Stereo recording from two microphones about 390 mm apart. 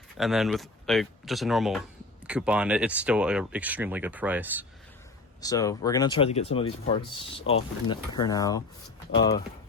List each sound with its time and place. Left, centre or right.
0.2 s speech: centre
5.4 s speech: centre
9.1 s speech: left